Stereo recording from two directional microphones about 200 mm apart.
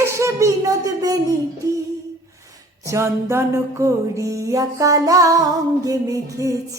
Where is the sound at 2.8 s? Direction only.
15° right (ahead or behind).